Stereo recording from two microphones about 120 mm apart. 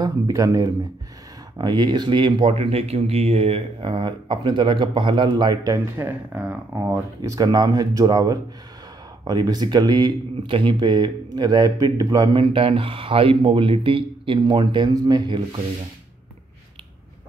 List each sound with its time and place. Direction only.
0.0 s speech: 30° right (ahead or behind)
5.6 s speech: 25° right (ahead or behind)
7.2 s speech: 35° right (ahead or behind)